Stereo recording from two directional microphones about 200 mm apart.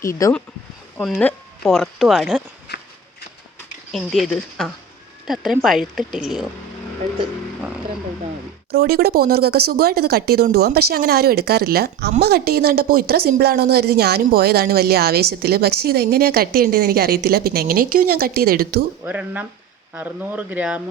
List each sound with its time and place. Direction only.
0.0 s speech: 15° left (ahead or behind)
0.9 s speech: 5° left (ahead or behind)
2.7 s walk: 55° left (ahead or behind)
3.9 s speech: centre (ahead or behind)
8.7 s a woman's voice: 50° right (ahead or behind)
19.0 s speech: 10° right (ahead or behind)